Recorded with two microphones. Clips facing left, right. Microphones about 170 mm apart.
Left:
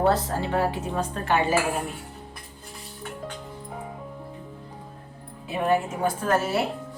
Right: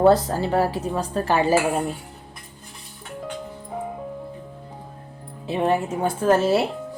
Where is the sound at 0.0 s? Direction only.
35° right (ahead or behind).